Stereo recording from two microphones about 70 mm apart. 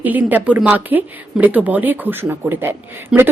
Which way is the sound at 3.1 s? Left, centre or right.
Centre.